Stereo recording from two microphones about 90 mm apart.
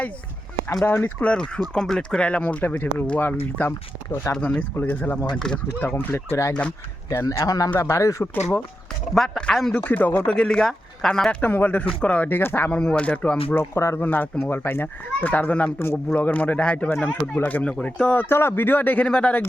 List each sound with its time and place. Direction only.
0.9 s speech: 25° left (ahead or behind)
1.2 s speech: 10° left (ahead or behind)
4.1 s speech: 35° left (ahead or behind)
4.4 s speech: 15° left (ahead or behind)
5.5 s speech: 5° left (ahead or behind)
5.8 s speech: 20° left (ahead or behind)
6.5 s speech: 10° left (ahead or behind)
7.1 s speech: 35° left (ahead or behind)
9.1 s speech: 5° left (ahead or behind)
9.8 s speech: 20° left (ahead or behind)
10.2 s speech: 10° left (ahead or behind)
11.3 s speech: 20° left (ahead or behind)
12.7 s speech: 10° left (ahead or behind)
13.5 s speech: 30° left (ahead or behind); by 19.4 s 15° left (ahead or behind)